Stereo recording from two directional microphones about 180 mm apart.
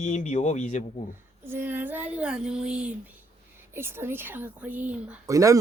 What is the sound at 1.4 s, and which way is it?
Speech, 10° right (ahead or behind).